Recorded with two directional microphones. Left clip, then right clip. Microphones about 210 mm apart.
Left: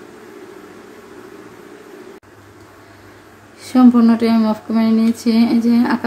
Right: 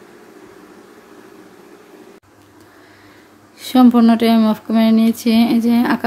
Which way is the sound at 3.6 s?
45° right (ahead or behind).